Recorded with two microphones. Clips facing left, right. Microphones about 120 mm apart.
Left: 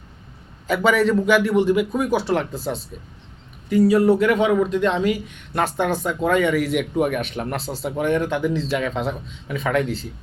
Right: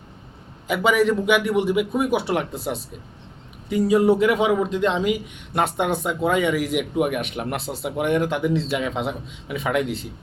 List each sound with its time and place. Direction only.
0.7 s speech: 10° right (ahead or behind)
3.7 s speech: 20° right (ahead or behind)
8.2 s speech: 25° right (ahead or behind)